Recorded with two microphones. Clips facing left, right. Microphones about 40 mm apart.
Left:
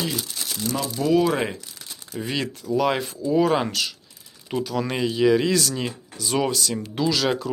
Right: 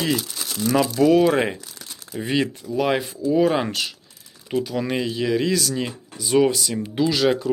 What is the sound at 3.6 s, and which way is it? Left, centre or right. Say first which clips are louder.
Speech: even; centre.